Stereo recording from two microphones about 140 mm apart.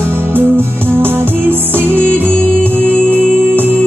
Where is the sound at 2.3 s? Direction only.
10° left (ahead or behind).